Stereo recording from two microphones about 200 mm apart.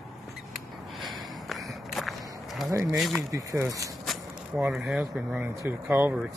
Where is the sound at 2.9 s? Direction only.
Centre (ahead or behind).